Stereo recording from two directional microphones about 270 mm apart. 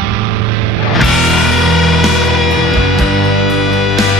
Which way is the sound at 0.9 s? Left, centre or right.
Centre.